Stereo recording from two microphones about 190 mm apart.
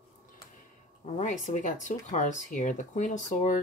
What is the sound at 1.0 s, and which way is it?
Speech, 40° left (ahead or behind).